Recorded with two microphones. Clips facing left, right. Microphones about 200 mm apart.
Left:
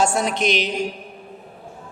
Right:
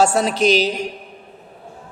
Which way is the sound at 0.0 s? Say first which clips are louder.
Right 4 dB; 35° right (ahead or behind).